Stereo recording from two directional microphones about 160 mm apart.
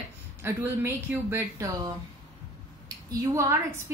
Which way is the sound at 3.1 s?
20° right (ahead or behind).